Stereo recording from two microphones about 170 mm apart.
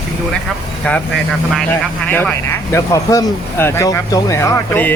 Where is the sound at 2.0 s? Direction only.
10° left (ahead or behind).